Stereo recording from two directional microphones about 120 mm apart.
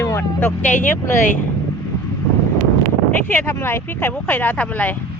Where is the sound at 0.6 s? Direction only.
90° left.